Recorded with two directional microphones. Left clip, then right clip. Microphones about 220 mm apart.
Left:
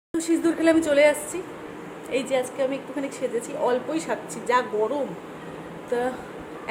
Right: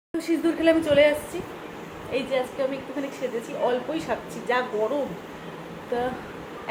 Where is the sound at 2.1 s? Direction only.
20° left (ahead or behind).